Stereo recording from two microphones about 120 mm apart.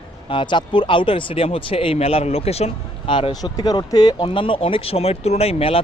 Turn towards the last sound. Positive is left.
turn(degrees=55)  # may be behind; listen again after turning